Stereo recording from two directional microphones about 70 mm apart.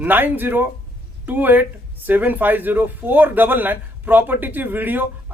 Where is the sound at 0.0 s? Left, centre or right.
Right.